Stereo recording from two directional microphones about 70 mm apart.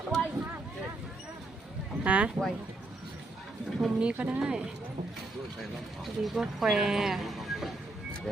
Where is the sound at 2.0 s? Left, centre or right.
Right.